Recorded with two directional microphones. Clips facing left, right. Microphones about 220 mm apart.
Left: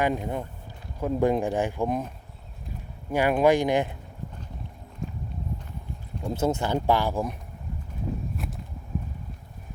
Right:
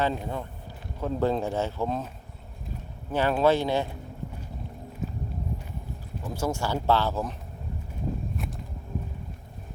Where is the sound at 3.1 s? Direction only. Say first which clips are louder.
Left 2 dB; 15° left (ahead or behind).